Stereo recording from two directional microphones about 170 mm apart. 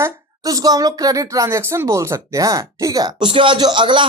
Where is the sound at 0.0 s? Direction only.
20° right (ahead or behind).